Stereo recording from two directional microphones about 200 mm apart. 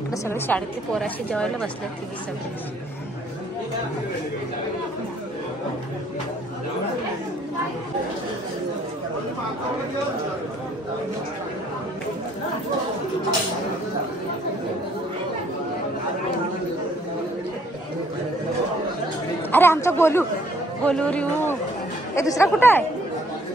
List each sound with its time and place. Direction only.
0.1 s speech: 10° left (ahead or behind)
19.5 s speech: 10° left (ahead or behind)